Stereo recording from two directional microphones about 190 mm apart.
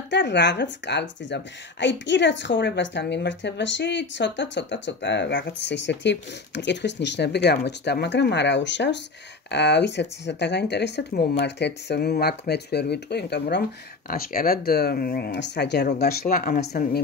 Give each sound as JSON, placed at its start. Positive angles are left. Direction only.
{"t": 0.1, "sound": "speech", "side_deg": 65}
{"t": 14.0, "sound": "speech", "side_deg": 50}